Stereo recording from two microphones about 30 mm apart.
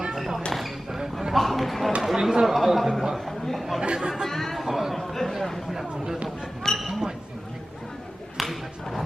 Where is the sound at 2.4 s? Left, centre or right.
Centre.